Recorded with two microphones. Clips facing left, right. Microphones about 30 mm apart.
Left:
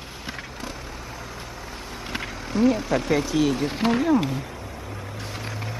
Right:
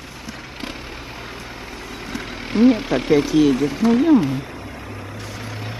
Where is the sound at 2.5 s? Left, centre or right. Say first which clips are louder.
Right 5 dB; right.